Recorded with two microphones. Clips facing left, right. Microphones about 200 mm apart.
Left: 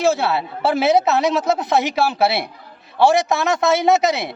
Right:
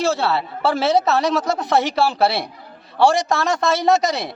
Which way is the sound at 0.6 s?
20° left (ahead or behind).